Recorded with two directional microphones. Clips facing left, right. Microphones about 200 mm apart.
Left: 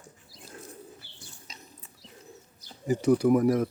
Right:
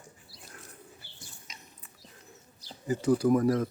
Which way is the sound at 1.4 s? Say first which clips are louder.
Left 3 dB; 30° left (ahead or behind).